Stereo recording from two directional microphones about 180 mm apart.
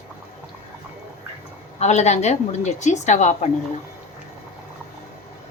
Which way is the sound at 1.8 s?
40° left (ahead or behind).